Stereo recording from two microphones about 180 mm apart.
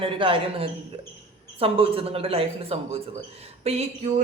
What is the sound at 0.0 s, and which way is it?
A man's voice, 30° right (ahead or behind).